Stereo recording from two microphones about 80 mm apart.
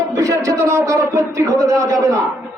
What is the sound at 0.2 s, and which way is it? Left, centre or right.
A man's voice, right.